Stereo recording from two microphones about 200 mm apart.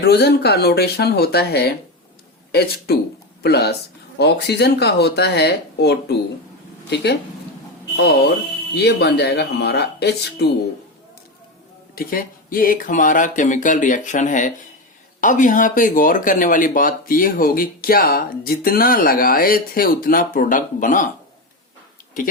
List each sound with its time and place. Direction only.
0.0 s speech: 55° left (ahead or behind)
8.7 s speech: 55° left (ahead or behind)
11.9 s speech: 45° left (ahead or behind)